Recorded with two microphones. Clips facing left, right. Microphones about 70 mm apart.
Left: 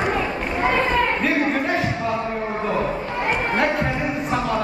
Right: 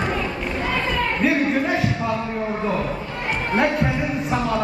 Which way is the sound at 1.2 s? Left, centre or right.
Centre.